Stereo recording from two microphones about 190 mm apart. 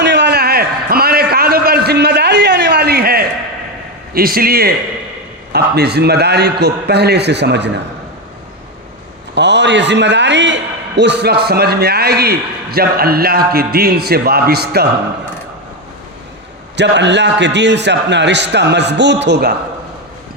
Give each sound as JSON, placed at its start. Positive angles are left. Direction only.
{"t": 0.0, "sound": "a sound", "side_deg": -65}
{"t": 4.1, "sound": "a man's voice", "side_deg": -50}
{"t": 9.3, "sound": "a man's voice", "side_deg": -65}
{"t": 16.7, "sound": "a man's voice", "side_deg": -65}